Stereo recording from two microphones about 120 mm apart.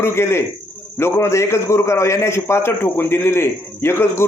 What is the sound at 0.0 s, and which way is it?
A man's voice, 20° left (ahead or behind).